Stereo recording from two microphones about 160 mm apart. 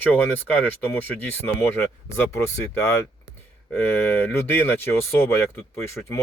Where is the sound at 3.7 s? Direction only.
10° left (ahead or behind).